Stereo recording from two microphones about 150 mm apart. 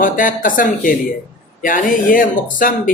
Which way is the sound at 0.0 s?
65° left (ahead or behind).